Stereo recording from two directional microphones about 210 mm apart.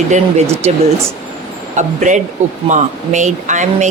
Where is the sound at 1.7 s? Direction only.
35° right (ahead or behind).